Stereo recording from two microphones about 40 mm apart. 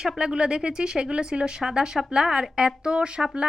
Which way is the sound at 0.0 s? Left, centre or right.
Right.